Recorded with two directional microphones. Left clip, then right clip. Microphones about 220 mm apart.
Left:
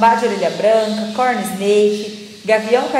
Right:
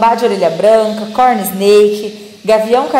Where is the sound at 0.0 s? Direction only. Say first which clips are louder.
Right 3 dB; 35° right (ahead or behind).